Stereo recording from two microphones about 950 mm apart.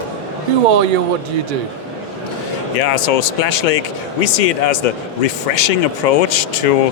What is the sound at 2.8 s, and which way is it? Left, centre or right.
Speech, left.